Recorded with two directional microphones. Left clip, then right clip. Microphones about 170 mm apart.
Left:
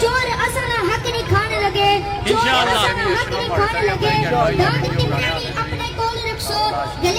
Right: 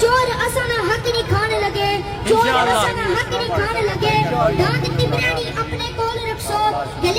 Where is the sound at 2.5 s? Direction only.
40° right (ahead or behind).